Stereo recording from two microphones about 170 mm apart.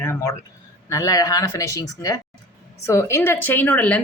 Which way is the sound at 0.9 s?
20° left (ahead or behind).